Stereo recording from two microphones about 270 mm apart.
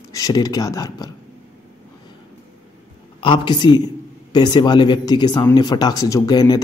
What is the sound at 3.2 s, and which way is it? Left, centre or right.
Speech, centre.